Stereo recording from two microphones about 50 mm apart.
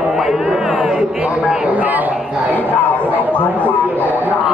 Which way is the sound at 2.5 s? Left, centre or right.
Left.